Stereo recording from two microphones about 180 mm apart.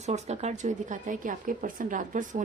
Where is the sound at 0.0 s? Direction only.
40° right (ahead or behind).